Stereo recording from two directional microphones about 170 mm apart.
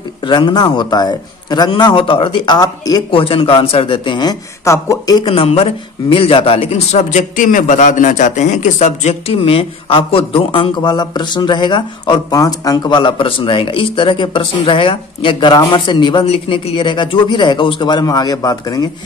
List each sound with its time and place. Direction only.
0.3 s a man's voice: 25° left (ahead or behind)